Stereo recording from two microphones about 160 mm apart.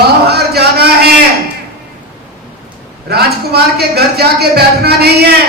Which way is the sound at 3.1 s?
80° right.